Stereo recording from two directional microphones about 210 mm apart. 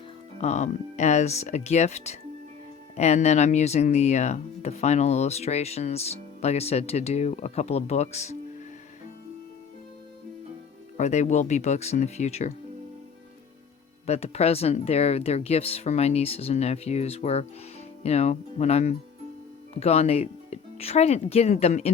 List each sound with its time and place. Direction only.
0.4 s speech: 35° left (ahead or behind)
10.9 s speech: 35° left (ahead or behind)
14.1 s speech: 30° left (ahead or behind)